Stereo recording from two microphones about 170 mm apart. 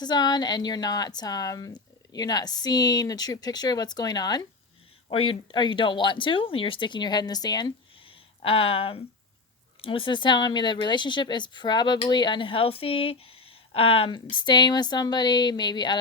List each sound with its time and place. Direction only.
0.0 s speech: 25° left (ahead or behind)